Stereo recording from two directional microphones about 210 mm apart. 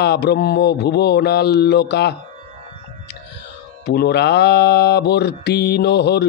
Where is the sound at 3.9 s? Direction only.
55° left (ahead or behind).